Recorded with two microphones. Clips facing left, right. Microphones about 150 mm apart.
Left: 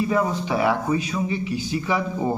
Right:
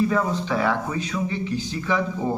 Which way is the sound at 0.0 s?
15° left (ahead or behind).